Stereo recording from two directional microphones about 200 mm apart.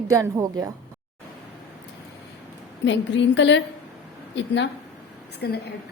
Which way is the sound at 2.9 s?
65° left (ahead or behind).